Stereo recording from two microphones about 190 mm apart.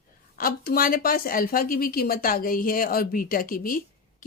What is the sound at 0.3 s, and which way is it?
Speech, 50° left (ahead or behind).